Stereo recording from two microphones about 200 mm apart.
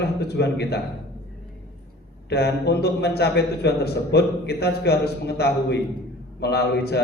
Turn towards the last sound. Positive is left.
turn(degrees=55)  # may be behind; listen again after turning